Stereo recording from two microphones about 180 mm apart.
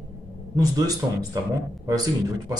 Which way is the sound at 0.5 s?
20° right (ahead or behind).